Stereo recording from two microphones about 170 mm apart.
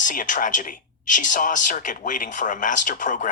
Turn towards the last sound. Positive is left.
turn(degrees=50)  # may be behind; listen again after turning